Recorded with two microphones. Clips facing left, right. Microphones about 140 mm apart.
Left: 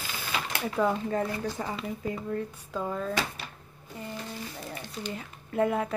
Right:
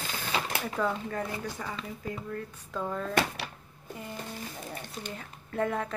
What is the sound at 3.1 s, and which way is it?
Speech, 65° right (ahead or behind).